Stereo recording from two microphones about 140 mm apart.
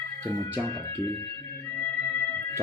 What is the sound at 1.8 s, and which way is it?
Music, 15° left (ahead or behind).